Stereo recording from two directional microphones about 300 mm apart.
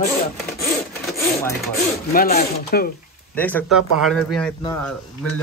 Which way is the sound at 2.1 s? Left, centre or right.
Left.